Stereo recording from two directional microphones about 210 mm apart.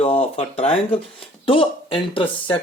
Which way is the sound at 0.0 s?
30° left (ahead or behind).